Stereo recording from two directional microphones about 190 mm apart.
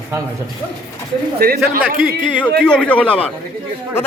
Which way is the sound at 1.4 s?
50° right (ahead or behind).